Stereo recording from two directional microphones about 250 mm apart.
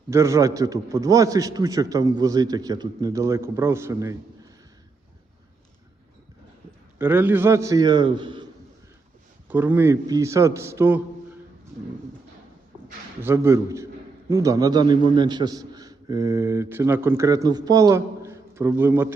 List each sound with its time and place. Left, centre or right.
0.1 s a man's voice: centre
7.0 s a man's voice: centre
9.5 s a man's voice: centre
13.2 s a man's voice: centre